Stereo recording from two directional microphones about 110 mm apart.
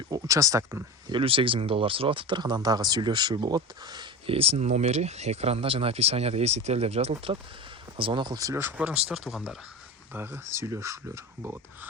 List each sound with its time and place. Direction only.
0.1 s speech: 30° right (ahead or behind)
1.0 s speech: 50° right (ahead or behind)
4.3 s speech: 65° right (ahead or behind)
7.9 s speech: 50° right (ahead or behind)
8.5 s speech: 20° right (ahead or behind)
8.9 s speech: 5° right (ahead or behind)
10.1 s speech: 20° right (ahead or behind)